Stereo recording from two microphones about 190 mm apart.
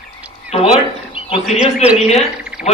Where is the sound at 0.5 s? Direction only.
35° left (ahead or behind).